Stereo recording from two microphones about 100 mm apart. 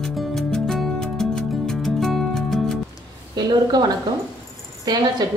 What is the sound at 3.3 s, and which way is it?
Speech, 45° right (ahead or behind).